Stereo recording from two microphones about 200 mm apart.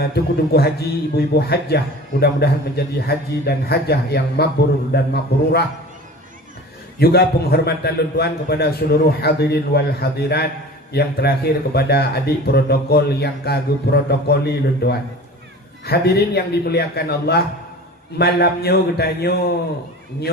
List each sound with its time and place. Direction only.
0.1 s a man's voice: 50° left (ahead or behind)
7.0 s a man's voice: 50° left (ahead or behind)